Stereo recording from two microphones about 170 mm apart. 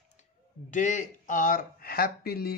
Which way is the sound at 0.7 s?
50° left (ahead or behind).